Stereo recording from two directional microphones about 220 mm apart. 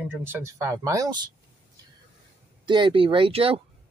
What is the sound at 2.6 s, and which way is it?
Speech, 20° right (ahead or behind).